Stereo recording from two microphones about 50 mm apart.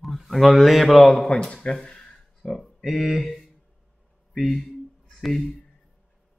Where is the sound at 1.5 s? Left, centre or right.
Centre.